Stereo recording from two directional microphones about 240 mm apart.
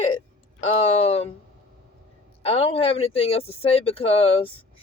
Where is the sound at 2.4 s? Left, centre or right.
Left.